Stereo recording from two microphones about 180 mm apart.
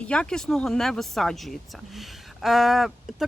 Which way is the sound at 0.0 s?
5° left (ahead or behind).